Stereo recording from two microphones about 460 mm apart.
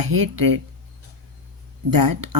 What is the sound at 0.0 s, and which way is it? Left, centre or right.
Speech, right.